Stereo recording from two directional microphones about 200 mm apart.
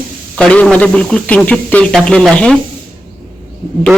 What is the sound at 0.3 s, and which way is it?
A man's voice, 5° left (ahead or behind).